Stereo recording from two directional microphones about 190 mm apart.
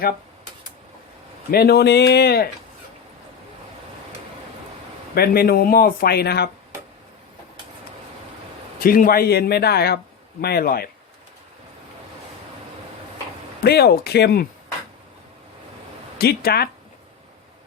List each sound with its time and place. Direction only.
1.5 s speech: 55° left (ahead or behind)
5.1 s speech: 55° left (ahead or behind)
8.8 s speech: 50° left (ahead or behind)
13.6 s speech: 55° left (ahead or behind)
16.1 s speech: 55° left (ahead or behind)